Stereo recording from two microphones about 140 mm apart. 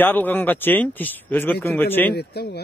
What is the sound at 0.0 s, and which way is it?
Speech, 15° left (ahead or behind).